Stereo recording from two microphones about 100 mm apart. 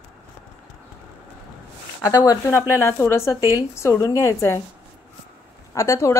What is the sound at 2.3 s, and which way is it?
Speech, 25° left (ahead or behind).